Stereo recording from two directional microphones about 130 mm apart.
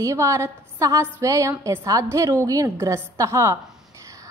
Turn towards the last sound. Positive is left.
turn(degrees=-20)  # may be behind; listen again after turning